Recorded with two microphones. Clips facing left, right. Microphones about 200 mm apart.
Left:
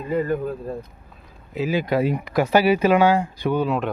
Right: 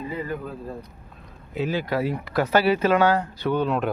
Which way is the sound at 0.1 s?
45° left (ahead or behind).